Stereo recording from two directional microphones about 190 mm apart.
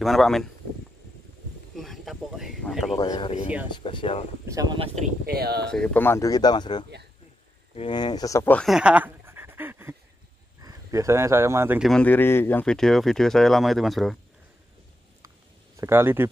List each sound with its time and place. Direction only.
0.0 s speech: centre (ahead or behind)
1.8 s a sound: centre (ahead or behind)
3.0 s speech: 25° left (ahead or behind)
4.5 s speech: 20° right (ahead or behind)
4.7 s speech: 35° right (ahead or behind)
5.2 s speech: 55° right (ahead or behind)
5.7 s speech: 5° left (ahead or behind); by 11.8 s 15° right (ahead or behind)
11.8 s speech: 5° left (ahead or behind)
15.2 s a sound: 15° right (ahead or behind)